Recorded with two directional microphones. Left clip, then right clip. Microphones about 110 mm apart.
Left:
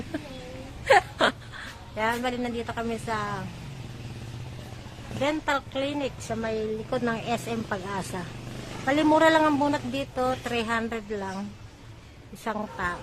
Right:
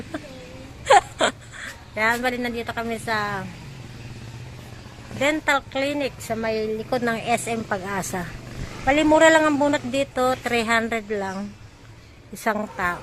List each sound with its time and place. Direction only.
2.0 s a woman's voice: 25° right (ahead or behind)
5.2 s a woman's voice: 25° right (ahead or behind)
6.3 s a woman's voice: 30° right (ahead or behind); by 7.6 s 15° right (ahead or behind)
7.7 s a woman's voice: 30° right (ahead or behind)
8.8 s a man's voice: 10° right (ahead or behind)
9.6 s speech: 20° right (ahead or behind)
12.7 s speech: 35° right (ahead or behind)